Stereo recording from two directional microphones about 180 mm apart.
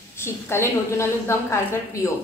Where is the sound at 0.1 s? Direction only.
15° left (ahead or behind).